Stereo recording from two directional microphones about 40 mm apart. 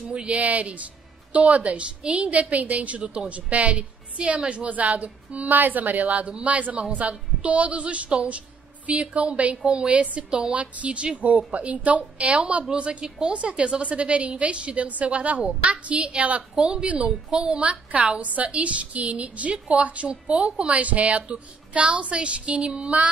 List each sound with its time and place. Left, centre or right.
0.1 s a woman's voice: right
16.5 s a woman's voice: right
16.8 s a woman's voice: right